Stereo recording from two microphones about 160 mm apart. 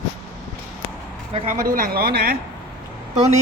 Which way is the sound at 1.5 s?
60° right (ahead or behind).